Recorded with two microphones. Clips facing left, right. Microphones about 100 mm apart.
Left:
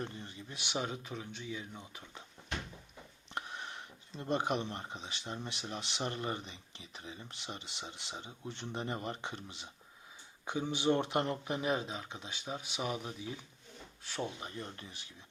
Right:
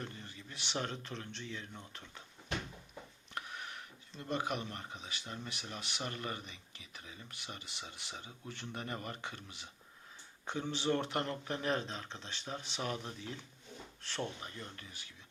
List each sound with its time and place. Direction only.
0.0 s speech: 20° left (ahead or behind)
3.3 s speech: 30° left (ahead or behind)
10.4 s speech: 10° left (ahead or behind)
14.4 s speech: 25° left (ahead or behind)